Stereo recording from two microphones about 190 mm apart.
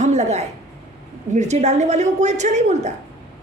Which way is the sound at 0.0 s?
35° right (ahead or behind).